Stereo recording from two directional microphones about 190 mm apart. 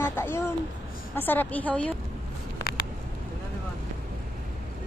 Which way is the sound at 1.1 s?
10° left (ahead or behind).